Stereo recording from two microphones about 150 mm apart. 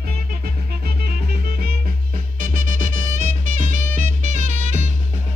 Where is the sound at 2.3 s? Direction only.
65° right (ahead or behind).